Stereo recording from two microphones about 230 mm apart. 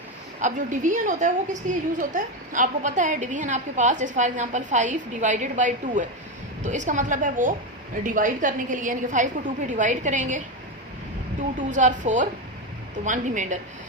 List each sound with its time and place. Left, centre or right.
0.4 s a woman's voice: right
11.7 s a woman's voice: right